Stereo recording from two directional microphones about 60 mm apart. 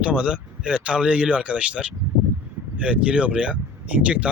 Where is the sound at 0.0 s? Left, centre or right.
Right.